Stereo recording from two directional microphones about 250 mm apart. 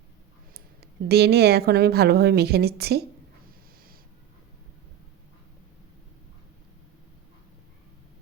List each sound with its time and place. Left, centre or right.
0.5 s speech: right